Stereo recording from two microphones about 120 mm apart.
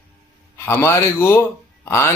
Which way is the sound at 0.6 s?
20° left (ahead or behind).